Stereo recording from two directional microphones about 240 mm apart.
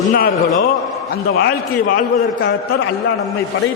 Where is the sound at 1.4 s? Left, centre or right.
Left.